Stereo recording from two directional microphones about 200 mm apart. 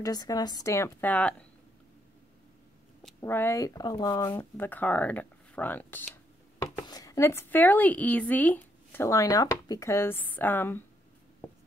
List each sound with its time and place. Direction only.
0.0 s speech: 20° left (ahead or behind)
3.2 s speech: 10° left (ahead or behind)